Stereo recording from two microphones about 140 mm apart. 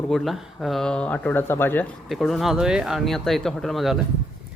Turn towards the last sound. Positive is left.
turn(degrees=0)  # may be behind; listen again after turning